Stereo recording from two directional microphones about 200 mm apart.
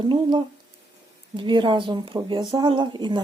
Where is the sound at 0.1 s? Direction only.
25° right (ahead or behind).